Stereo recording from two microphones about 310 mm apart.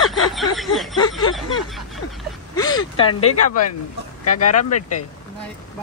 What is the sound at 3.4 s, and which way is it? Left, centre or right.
Speech, left.